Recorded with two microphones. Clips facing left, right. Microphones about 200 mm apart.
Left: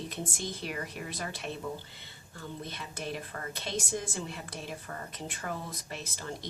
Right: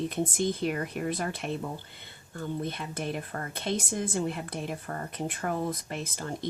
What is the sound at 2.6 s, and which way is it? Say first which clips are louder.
A woman's voice: right 6 dB; 55° right (ahead or behind).